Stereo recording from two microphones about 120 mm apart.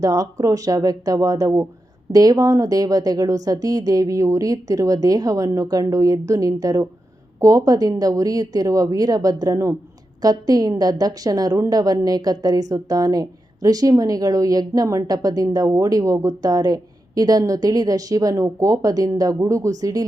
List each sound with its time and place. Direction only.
0.0 s a woman's voice: 30° right (ahead or behind)